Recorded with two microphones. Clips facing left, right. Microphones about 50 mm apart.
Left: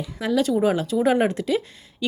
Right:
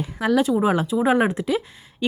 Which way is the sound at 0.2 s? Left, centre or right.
Right.